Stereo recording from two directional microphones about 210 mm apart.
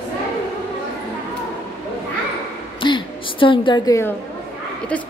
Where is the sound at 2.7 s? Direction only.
20° left (ahead or behind).